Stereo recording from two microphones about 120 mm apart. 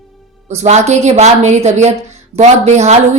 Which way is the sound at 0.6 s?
70° right (ahead or behind).